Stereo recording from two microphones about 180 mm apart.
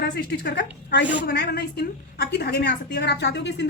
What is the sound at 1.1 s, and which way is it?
A woman's voice, 65° left (ahead or behind).